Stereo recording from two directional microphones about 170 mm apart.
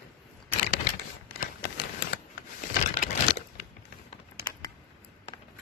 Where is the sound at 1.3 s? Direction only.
60° left (ahead or behind).